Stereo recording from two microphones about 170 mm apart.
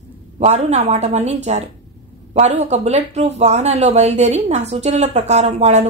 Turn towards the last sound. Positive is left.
turn(degrees=-40)  # may be behind; listen again after turning